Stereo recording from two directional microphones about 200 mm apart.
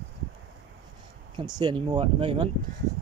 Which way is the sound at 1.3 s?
25° right (ahead or behind).